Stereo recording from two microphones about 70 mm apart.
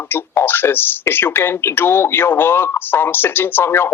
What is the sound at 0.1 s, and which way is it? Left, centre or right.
Speech, left.